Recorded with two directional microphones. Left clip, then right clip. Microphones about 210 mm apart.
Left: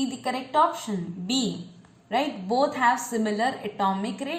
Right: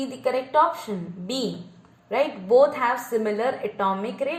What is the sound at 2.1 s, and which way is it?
A woman's voice, 25° right (ahead or behind).